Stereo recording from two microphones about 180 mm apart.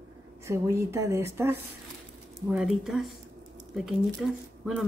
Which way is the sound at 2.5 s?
5° right (ahead or behind).